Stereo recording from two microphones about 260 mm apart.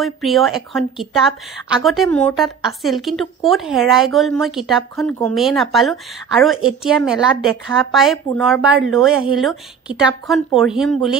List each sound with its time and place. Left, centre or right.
0.0 s a woman's voice: centre